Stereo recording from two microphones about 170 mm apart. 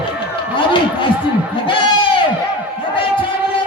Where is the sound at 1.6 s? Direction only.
30° left (ahead or behind).